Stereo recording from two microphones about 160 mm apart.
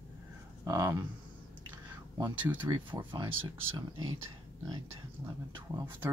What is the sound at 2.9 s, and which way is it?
Speech, 30° right (ahead or behind).